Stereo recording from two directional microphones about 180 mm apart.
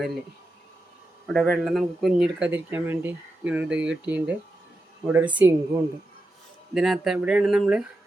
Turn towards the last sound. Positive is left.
turn(degrees=-5)  # may be behind; listen again after turning